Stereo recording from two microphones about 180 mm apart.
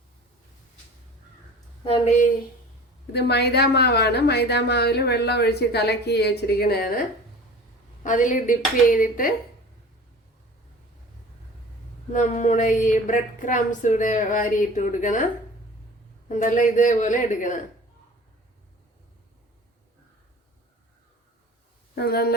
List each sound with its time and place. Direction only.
1.8 s speech: 35° left (ahead or behind)
3.1 s a woman's voice: 65° left (ahead or behind)
8.0 s a woman's voice: 45° left (ahead or behind)
12.1 s a woman's voice: 45° left (ahead or behind)
16.3 s a woman's voice: 45° left (ahead or behind)
21.9 s a woman's voice: 60° left (ahead or behind)